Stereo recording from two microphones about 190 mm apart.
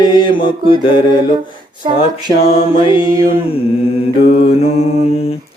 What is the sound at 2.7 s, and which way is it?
Mantra, 25° left (ahead or behind).